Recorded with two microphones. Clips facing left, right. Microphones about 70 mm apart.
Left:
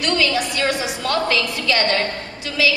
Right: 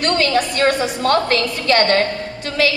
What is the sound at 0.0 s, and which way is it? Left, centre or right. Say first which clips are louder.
A woman's voice: right 3 dB; right.